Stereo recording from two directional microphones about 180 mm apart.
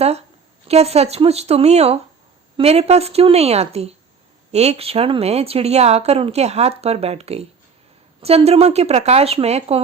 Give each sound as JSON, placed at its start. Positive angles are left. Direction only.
{"t": 0.7, "sound": "speech", "side_deg": -35}